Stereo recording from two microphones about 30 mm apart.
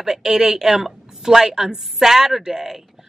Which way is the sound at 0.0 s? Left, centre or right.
Centre.